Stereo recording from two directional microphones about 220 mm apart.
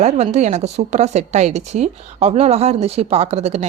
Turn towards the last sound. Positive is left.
turn(degrees=-30)  # may be behind; listen again after turning